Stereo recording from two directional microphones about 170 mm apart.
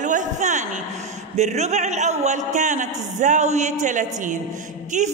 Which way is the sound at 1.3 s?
40° right (ahead or behind).